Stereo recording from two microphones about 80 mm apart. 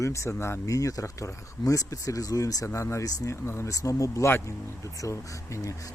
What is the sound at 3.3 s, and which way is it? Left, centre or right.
Speech, left.